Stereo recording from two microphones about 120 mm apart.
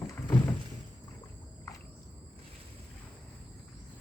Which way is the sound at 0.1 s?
20° left (ahead or behind).